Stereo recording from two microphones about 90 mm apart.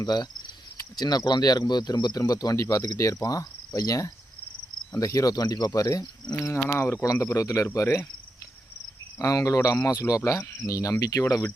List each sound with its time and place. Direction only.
0.0 s speech: 50° left (ahead or behind)
6.7 s speech: 30° left (ahead or behind)
9.1 s speech: 40° left (ahead or behind)